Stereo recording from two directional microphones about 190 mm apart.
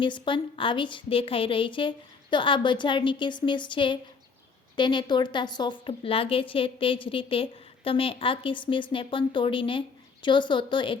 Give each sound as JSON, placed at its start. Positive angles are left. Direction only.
{"t": 0.0, "sound": "a woman's voice", "side_deg": 25}